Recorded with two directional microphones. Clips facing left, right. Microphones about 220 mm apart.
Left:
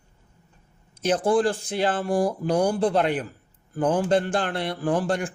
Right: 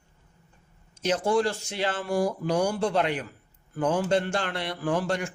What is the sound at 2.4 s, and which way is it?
A man's voice, 50° left (ahead or behind).